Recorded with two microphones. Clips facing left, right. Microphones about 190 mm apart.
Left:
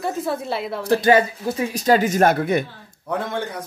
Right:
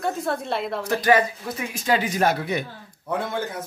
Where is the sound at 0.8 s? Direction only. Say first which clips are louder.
Left 4 dB; 30° left (ahead or behind); by 2.6 s 50° left (ahead or behind).